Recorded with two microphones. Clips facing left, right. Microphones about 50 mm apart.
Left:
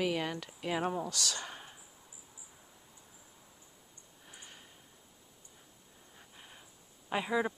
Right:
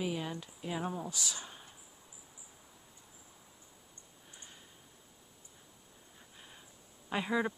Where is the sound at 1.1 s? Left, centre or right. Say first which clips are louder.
Left 4 dB; left.